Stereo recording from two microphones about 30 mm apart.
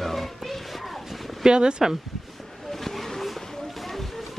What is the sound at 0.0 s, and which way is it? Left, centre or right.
Music, centre.